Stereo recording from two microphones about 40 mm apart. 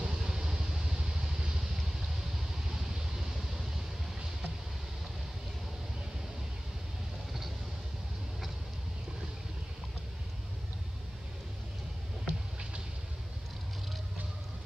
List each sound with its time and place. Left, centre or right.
0.0 s vehicle: centre
2.7 s vehicle: centre
12.3 s a sound: right